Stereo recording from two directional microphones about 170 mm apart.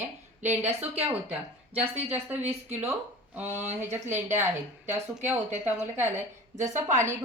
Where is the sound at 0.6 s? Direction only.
40° right (ahead or behind).